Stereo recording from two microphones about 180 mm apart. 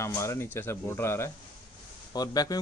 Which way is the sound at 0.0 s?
15° left (ahead or behind).